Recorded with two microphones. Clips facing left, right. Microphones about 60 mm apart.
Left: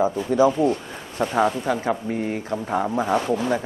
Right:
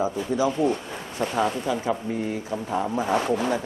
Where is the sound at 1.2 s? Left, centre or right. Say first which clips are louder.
Left 4 dB; left.